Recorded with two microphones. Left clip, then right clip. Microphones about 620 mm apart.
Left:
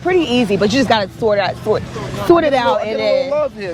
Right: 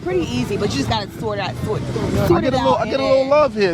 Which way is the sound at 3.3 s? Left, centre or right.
Centre.